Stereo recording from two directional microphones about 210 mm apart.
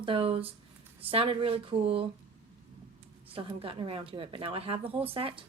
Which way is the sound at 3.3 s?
25° right (ahead or behind).